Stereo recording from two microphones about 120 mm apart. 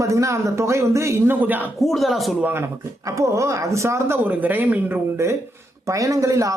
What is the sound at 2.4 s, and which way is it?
Speech, 20° right (ahead or behind).